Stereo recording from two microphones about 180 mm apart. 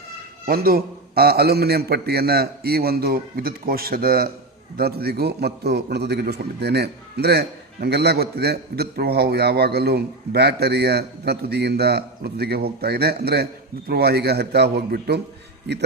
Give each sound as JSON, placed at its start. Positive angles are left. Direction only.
{"t": 0.4, "sound": "a man's voice", "side_deg": -55}